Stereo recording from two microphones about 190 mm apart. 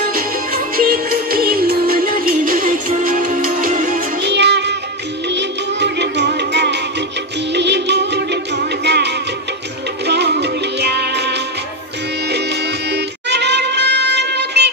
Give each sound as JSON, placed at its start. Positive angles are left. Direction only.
{"t": 0.1, "sound": "music", "side_deg": -50}
{"t": 4.3, "sound": "music", "side_deg": -65}
{"t": 12.9, "sound": "music", "side_deg": -65}